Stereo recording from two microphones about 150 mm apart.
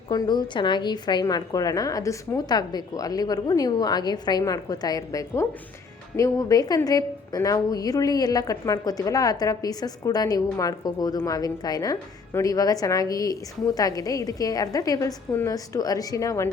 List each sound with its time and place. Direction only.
0.1 s a woman's voice: 30° left (ahead or behind)